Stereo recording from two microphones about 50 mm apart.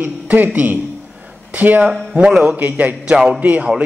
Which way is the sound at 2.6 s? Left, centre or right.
Right.